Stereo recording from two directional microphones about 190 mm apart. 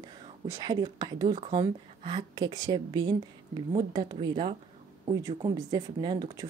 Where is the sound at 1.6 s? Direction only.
25° right (ahead or behind).